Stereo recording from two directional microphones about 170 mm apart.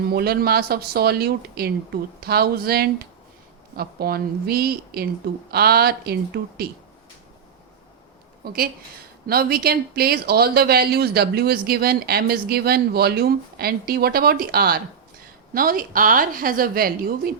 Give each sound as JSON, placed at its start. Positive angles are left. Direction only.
{"t": 0.1, "sound": "speech", "side_deg": -65}
{"t": 8.4, "sound": "speech", "side_deg": -60}